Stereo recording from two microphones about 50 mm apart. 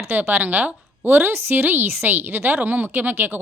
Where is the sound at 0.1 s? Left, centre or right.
Right.